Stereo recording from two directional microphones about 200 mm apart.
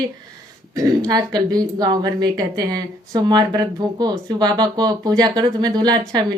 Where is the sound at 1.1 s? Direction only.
20° right (ahead or behind).